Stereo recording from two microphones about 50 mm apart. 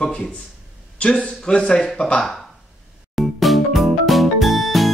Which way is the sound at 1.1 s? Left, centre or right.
Centre.